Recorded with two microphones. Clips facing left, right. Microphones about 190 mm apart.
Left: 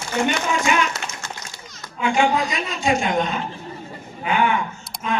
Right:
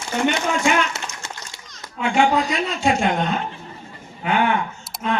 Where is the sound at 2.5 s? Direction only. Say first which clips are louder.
Right 1 dB; 60° right (ahead or behind).